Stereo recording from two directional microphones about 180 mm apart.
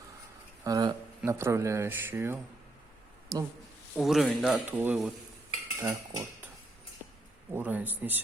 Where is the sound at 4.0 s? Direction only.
Centre (ahead or behind).